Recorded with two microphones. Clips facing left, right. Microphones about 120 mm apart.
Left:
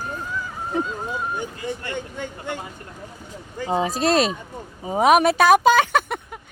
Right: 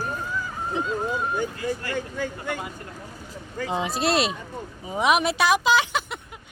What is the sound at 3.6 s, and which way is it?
Speech, 35° left (ahead or behind).